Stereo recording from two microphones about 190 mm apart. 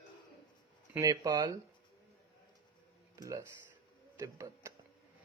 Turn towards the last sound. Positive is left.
turn(degrees=-15)  # may be behind; listen again after turning